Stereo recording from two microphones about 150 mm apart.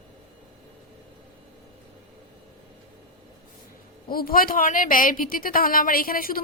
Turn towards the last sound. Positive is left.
turn(degrees=70)  # may be behind; listen again after turning